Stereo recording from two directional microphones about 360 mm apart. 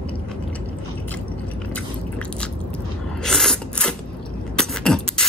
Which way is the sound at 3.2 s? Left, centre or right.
Centre.